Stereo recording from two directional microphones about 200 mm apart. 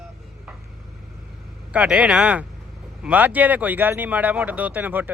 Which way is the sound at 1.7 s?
5° right (ahead or behind).